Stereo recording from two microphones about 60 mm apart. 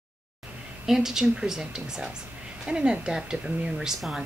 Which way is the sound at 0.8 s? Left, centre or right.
Centre.